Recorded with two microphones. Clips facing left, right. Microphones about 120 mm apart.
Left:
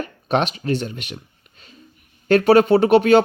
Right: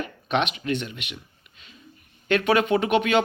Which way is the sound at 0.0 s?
40° left (ahead or behind).